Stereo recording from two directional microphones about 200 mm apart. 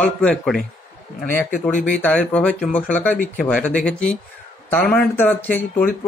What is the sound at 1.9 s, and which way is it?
Speech, 5° left (ahead or behind).